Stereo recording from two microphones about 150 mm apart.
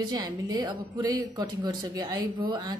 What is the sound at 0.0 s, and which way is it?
Speech, 25° right (ahead or behind).